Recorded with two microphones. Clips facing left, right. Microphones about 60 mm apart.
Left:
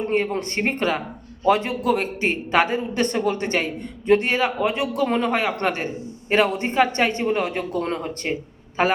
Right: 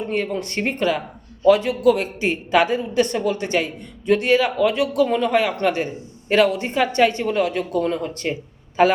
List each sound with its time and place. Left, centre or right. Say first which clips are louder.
0.1 s a man's voice: left 1 dB; left
5.0 s a man's voice: right 2 dB; left